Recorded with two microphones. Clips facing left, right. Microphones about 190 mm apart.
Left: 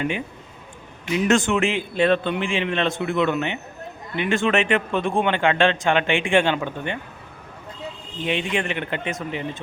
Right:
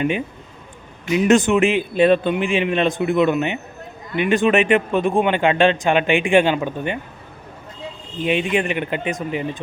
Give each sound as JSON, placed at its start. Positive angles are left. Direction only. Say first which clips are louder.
{"t": 1.1, "sound": "a man's voice", "louder": "right 5 dB", "side_deg": -20}
{"t": 8.2, "sound": "a man's voice", "louder": "right 5 dB", "side_deg": -15}